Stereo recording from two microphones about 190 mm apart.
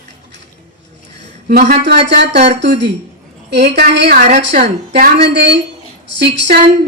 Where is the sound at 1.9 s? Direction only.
65° right (ahead or behind).